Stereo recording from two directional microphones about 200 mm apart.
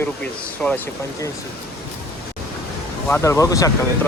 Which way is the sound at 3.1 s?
15° left (ahead or behind).